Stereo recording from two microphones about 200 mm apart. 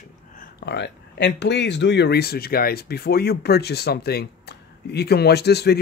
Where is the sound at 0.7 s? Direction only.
60° left (ahead or behind).